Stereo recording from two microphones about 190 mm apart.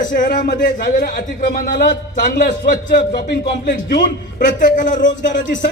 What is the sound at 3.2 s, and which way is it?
A man's voice, 60° left (ahead or behind).